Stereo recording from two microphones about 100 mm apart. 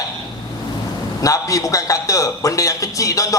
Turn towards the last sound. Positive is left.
turn(degrees=35)  # may be behind; listen again after turning